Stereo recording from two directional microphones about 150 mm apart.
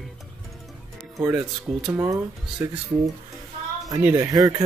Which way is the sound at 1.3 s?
5° right (ahead or behind).